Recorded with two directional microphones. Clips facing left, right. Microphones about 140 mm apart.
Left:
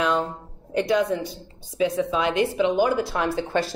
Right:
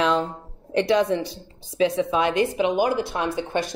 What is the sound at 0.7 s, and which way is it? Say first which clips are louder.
Speech: right 2 dB; 85° right.